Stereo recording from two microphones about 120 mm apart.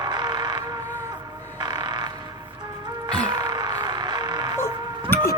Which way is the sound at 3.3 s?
35° right (ahead or behind).